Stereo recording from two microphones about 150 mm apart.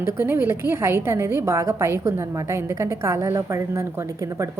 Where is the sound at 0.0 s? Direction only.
15° right (ahead or behind).